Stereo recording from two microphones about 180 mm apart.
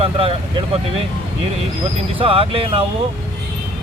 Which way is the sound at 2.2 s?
30° right (ahead or behind).